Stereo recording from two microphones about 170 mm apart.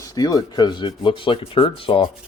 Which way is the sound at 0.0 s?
20° left (ahead or behind).